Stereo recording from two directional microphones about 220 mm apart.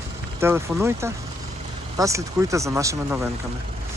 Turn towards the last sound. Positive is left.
turn(degrees=-15)  # may be behind; listen again after turning